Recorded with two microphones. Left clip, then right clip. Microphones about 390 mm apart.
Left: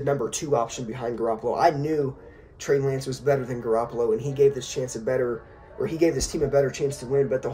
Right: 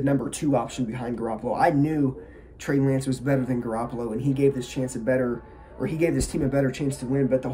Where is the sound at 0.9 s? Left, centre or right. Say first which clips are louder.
Left 7 dB; centre.